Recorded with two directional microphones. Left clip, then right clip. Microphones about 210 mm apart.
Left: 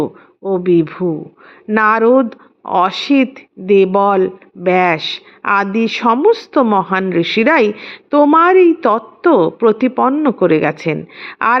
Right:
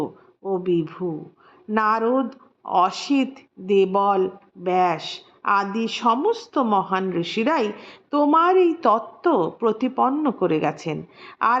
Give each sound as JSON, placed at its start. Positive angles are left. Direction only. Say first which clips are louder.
{"t": 0.0, "sound": "speech", "louder": "left 9 dB", "side_deg": 15}